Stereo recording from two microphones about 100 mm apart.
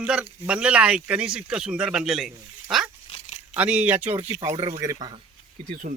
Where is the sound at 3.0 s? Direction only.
90° left.